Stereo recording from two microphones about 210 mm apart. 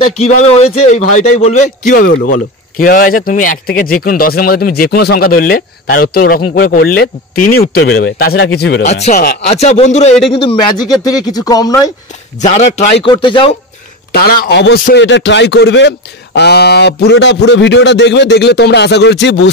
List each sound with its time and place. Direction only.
0.4 s a man's voice: 30° left (ahead or behind); by 8.8 s 50° left (ahead or behind)
8.8 s a man's voice: 30° left (ahead or behind)
12.4 s a man's voice: 35° left (ahead or behind)
14.1 s a man's voice: 45° left (ahead or behind)